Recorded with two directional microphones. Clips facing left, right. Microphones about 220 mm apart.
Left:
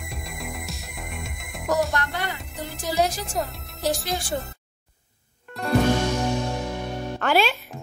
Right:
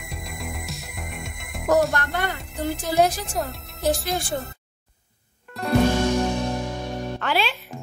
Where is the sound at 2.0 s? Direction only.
50° right (ahead or behind).